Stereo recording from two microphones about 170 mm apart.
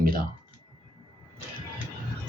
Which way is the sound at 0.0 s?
60° right (ahead or behind).